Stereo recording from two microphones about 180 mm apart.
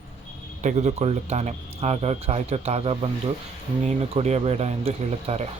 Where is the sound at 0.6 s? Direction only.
40° right (ahead or behind).